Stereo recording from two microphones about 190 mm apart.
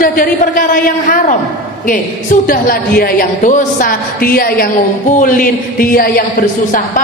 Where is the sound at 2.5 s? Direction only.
50° left (ahead or behind).